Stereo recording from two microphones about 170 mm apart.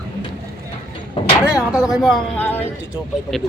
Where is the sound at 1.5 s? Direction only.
5° right (ahead or behind).